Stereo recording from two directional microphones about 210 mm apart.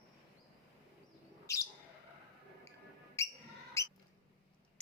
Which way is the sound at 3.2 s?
15° left (ahead or behind).